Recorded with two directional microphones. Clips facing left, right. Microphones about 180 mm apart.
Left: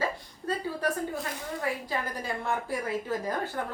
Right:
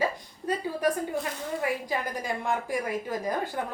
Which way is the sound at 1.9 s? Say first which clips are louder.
Right 2 dB; 15° right (ahead or behind).